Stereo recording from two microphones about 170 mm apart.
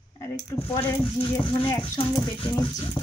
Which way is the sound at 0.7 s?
30° left (ahead or behind).